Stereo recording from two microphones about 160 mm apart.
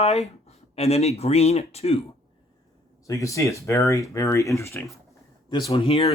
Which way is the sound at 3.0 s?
20° left (ahead or behind).